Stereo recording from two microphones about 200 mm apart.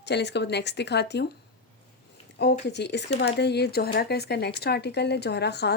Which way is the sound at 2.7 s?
60° left (ahead or behind).